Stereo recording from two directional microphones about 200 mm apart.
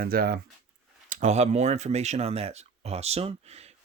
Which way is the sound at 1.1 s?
35° right (ahead or behind).